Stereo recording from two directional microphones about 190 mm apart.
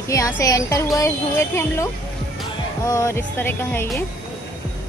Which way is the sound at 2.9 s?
15° left (ahead or behind).